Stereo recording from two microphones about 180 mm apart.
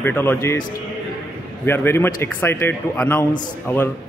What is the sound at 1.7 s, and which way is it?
A man's voice, 15° left (ahead or behind).